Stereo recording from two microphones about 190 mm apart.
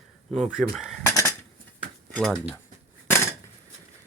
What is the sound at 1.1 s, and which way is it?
Cutlery, 15° left (ahead or behind).